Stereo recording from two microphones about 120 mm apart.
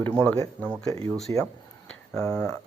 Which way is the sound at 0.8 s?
30° left (ahead or behind).